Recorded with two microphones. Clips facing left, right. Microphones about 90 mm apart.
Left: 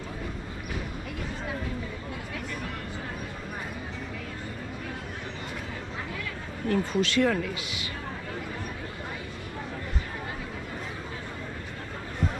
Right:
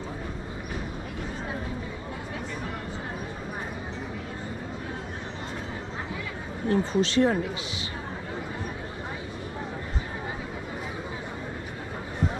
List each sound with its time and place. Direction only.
6.7 s speech: 25° right (ahead or behind)